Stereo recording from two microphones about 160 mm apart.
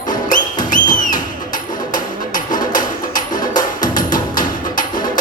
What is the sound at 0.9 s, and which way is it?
Music, 55° left (ahead or behind).